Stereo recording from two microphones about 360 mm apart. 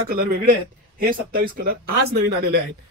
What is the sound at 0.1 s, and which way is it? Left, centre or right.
Speech, right.